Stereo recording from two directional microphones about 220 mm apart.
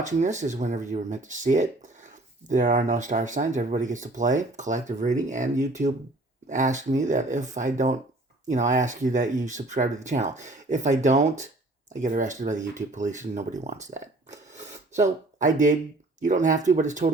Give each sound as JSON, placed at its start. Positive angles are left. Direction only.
{"t": 0.0, "sound": "speech", "side_deg": -35}